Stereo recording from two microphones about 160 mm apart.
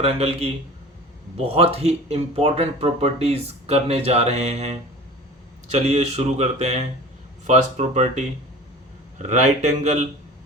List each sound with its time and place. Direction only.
0.0 s speech: 40° right (ahead or behind)
9.2 s speech: 45° right (ahead or behind)